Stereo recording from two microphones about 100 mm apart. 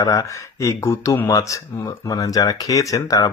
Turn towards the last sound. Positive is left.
turn(degrees=40)  # may be behind; listen again after turning